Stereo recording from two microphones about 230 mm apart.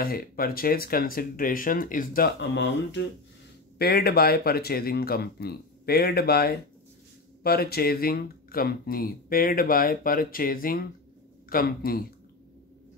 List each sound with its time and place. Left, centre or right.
0.0 s speech: left